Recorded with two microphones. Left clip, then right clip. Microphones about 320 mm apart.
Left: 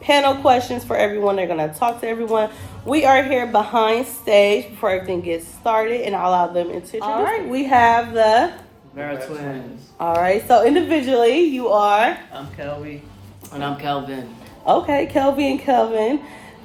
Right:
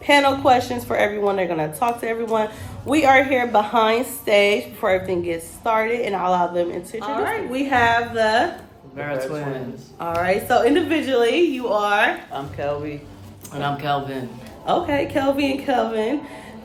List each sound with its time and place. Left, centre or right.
0.0 s a woman's voice: centre
7.0 s a woman's voice: centre
10.0 s a woman's voice: centre
12.3 s a woman's voice: centre
13.5 s a woman's voice: centre
14.7 s a woman's voice: centre